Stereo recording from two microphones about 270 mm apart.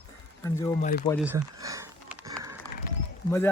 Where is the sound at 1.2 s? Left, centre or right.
Centre.